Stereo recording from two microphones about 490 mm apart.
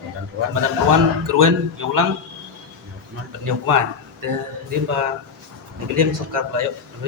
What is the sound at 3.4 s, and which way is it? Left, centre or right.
Speech, right.